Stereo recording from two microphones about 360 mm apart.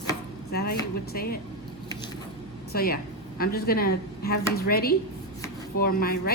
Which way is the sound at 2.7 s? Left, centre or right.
Left.